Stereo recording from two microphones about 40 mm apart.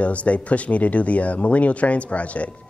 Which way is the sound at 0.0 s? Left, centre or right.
Left.